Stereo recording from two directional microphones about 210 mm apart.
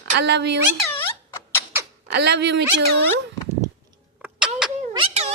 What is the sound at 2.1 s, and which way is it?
Speech, 55° right (ahead or behind).